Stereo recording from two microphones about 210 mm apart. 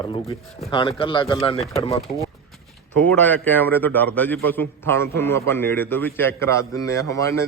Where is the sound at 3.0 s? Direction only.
10° left (ahead or behind).